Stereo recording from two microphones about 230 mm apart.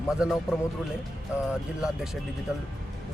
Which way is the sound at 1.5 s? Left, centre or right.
Centre.